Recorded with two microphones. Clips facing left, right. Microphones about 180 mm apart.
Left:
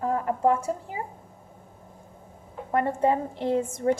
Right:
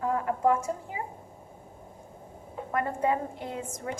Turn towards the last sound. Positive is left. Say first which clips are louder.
# left 11 dB
turn(degrees=30)  # may be behind; listen again after turning